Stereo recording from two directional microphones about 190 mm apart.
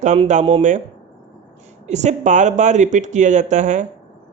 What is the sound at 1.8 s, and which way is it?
Speech, 35° right (ahead or behind).